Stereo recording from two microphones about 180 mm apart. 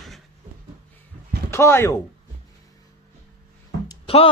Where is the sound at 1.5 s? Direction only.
15° left (ahead or behind).